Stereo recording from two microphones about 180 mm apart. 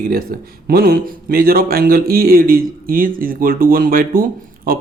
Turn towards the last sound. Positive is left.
turn(degrees=-55)  # may be behind; listen again after turning